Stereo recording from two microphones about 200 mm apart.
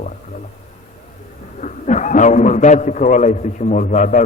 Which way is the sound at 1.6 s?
40° left (ahead or behind).